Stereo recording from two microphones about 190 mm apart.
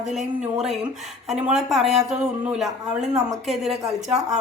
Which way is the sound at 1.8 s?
35° right (ahead or behind).